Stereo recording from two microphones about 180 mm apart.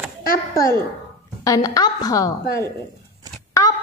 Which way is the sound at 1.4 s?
20° left (ahead or behind).